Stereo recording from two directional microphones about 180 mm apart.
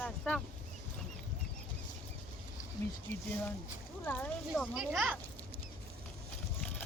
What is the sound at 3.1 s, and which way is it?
A child's voice, 10° left (ahead or behind).